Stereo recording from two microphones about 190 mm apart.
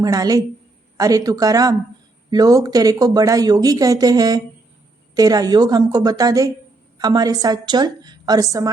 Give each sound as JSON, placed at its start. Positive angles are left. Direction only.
{"t": 0.0, "sound": "speech", "side_deg": -20}